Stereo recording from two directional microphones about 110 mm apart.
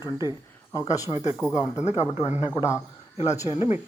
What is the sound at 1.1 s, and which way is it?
Speech, 45° left (ahead or behind).